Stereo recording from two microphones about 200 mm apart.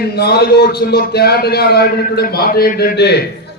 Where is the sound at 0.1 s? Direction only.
55° left (ahead or behind).